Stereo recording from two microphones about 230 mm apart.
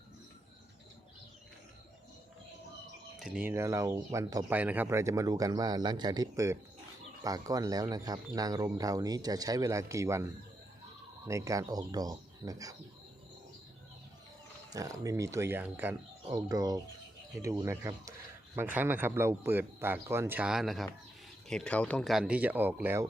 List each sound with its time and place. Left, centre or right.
3.2 s speech: centre
14.7 s speech: centre